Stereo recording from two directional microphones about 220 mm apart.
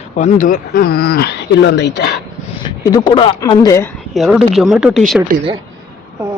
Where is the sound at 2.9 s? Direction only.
20° left (ahead or behind).